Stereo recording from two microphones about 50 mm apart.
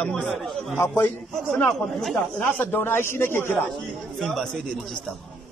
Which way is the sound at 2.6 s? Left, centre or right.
Left.